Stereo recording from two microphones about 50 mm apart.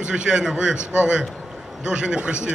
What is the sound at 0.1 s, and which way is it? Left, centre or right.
Speech, centre.